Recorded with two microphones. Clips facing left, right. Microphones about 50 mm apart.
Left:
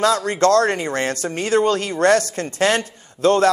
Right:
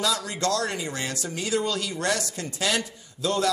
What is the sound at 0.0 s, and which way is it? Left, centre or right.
Speech, left.